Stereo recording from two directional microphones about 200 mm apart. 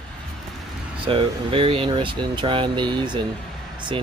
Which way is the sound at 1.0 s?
25° right (ahead or behind).